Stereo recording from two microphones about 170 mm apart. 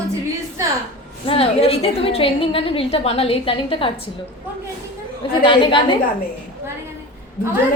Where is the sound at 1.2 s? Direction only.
35° left (ahead or behind).